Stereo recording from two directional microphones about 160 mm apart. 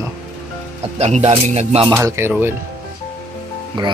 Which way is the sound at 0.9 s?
45° right (ahead or behind).